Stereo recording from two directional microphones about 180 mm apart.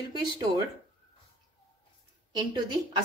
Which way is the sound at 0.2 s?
25° right (ahead or behind).